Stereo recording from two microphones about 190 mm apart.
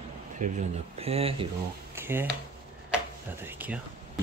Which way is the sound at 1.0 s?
30° right (ahead or behind).